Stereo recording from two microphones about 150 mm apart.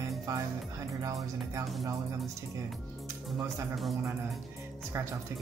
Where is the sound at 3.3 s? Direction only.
20° right (ahead or behind).